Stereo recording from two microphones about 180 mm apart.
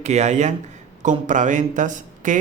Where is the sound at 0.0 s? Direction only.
40° right (ahead or behind).